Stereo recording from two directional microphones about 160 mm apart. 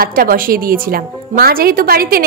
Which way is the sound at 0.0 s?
65° right (ahead or behind).